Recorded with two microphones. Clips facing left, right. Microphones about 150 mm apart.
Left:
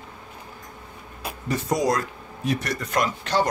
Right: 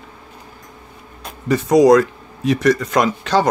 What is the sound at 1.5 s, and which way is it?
Speech, 85° right.